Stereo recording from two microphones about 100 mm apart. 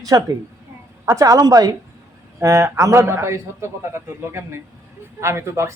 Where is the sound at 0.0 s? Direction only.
40° right (ahead or behind).